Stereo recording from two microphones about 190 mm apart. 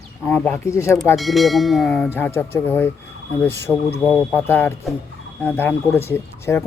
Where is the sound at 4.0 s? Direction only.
10° left (ahead or behind).